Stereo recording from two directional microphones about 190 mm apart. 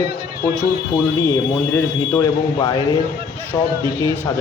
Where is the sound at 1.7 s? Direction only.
15° left (ahead or behind).